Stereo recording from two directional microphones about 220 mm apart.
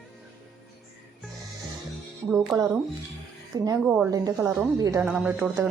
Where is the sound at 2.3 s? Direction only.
10° right (ahead or behind).